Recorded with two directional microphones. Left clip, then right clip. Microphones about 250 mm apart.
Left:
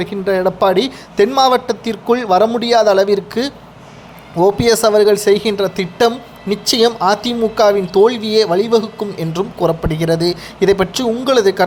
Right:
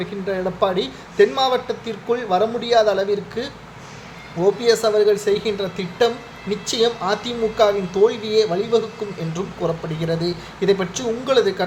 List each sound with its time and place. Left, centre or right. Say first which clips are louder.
0.0 s a man's voice: left 8 dB; left